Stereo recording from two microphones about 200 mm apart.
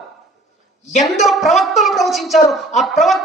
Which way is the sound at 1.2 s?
Centre (ahead or behind).